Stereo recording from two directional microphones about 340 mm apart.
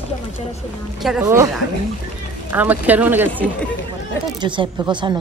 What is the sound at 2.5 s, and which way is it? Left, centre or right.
Speech, centre.